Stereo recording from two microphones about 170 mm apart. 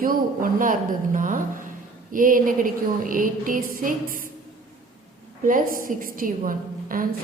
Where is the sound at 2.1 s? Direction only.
55° right (ahead or behind).